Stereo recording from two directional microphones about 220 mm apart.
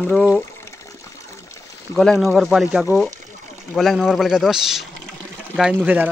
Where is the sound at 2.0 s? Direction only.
Centre (ahead or behind).